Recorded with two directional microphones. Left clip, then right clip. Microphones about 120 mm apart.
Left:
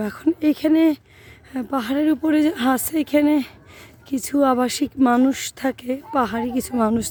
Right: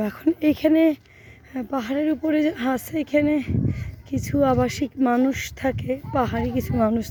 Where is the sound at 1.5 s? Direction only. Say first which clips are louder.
Left 3 dB; 40° left (ahead or behind).